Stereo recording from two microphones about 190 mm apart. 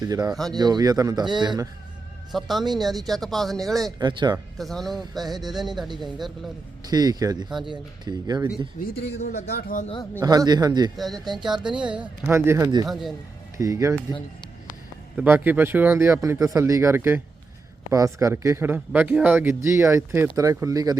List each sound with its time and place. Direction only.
0.0 s a man's voice: 20° right (ahead or behind)
2.3 s speech: centre (ahead or behind)
3.9 s a man's voice: 20° right (ahead or behind)
4.5 s speech: centre (ahead or behind)
6.8 s a man's voice: 20° right (ahead or behind)
8.8 s a man's voice: 45° left (ahead or behind)
9.3 s speech: 55° left (ahead or behind)
10.2 s a man's voice: 20° right (ahead or behind)
10.9 s speech: centre (ahead or behind); by 12.9 s 15° right (ahead or behind)
12.9 s speech: centre (ahead or behind)
13.6 s speech: 15° right (ahead or behind)
15.1 s speech: 10° right (ahead or behind)